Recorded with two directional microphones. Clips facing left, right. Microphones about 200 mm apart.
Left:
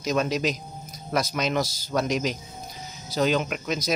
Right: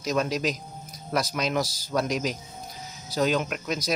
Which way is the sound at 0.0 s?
Centre (ahead or behind).